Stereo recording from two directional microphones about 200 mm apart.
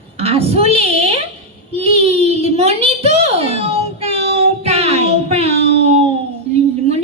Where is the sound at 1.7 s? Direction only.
30° right (ahead or behind).